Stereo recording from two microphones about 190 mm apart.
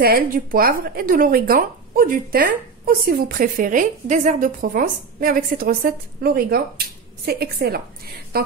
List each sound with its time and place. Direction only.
0.0 s a woman's voice: 50° right (ahead or behind)